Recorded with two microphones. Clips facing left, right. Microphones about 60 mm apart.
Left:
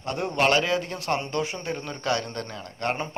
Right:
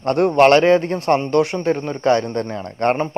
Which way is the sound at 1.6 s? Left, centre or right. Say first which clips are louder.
Right 11 dB; right.